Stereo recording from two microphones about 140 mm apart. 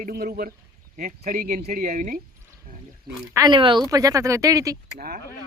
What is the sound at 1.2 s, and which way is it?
Speech, 75° right (ahead or behind).